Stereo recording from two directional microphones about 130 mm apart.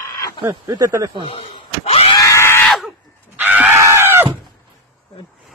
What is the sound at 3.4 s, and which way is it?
Screaming, 10° right (ahead or behind).